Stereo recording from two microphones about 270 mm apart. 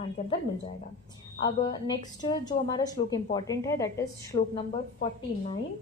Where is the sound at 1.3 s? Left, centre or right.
Centre.